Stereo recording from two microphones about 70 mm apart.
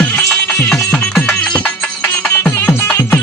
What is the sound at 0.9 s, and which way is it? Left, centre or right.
Music, centre.